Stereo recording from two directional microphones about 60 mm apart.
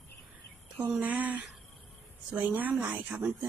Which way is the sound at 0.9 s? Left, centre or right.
Right.